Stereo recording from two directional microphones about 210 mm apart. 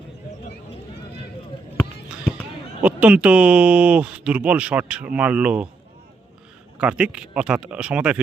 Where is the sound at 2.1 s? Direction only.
5° left (ahead or behind).